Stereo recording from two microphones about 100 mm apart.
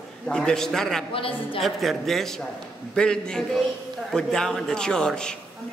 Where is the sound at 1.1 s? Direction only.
65° left (ahead or behind).